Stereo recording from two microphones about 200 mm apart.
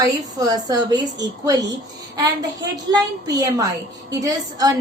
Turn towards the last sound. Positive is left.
turn(degrees=-20)  # may be behind; listen again after turning